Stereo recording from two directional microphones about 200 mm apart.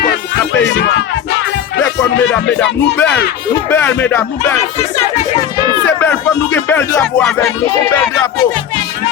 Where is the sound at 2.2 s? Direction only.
70° left (ahead or behind).